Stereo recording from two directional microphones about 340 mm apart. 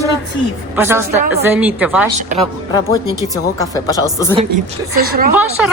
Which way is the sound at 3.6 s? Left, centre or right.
Centre.